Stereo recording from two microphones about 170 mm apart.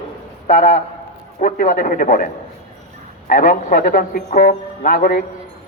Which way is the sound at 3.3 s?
55° left (ahead or behind).